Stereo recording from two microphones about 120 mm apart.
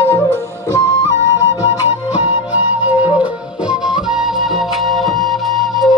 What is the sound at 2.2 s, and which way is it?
Music, 15° right (ahead or behind).